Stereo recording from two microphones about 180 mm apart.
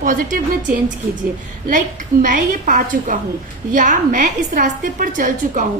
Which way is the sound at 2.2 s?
45° right (ahead or behind).